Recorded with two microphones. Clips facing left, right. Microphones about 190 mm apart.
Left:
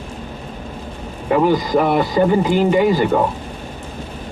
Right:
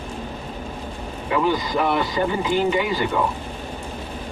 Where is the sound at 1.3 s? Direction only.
50° left (ahead or behind).